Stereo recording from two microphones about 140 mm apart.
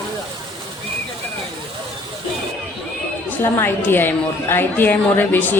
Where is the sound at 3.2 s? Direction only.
15° left (ahead or behind).